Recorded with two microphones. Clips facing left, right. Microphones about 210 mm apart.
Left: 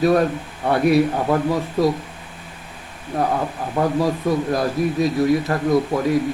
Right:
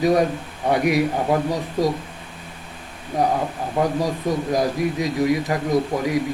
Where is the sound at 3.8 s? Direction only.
15° right (ahead or behind).